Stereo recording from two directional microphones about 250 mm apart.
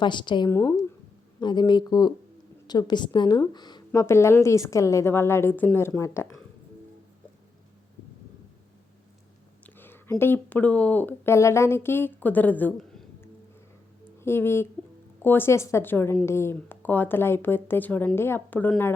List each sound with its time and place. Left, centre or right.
0.0 s a woman's voice: centre
9.6 s a woman's voice: centre